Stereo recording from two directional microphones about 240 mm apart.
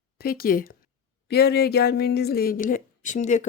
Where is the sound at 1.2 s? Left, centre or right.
Left.